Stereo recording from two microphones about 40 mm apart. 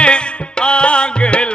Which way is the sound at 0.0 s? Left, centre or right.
Left.